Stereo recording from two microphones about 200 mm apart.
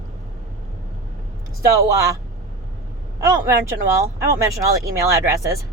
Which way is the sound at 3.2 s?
15° right (ahead or behind).